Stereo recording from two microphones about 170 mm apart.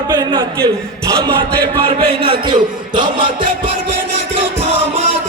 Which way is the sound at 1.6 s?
25° right (ahead or behind).